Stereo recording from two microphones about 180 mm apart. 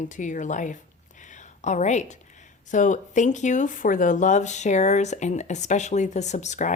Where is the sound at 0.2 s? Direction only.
45° left (ahead or behind).